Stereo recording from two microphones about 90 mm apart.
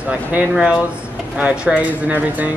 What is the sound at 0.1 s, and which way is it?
Speech, 15° right (ahead or behind).